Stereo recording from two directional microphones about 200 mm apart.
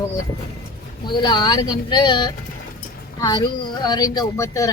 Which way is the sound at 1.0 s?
20° left (ahead or behind).